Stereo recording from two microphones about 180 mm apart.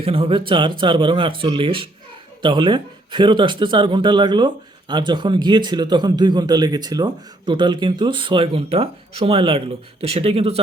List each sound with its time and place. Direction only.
0.0 s speech: 30° right (ahead or behind)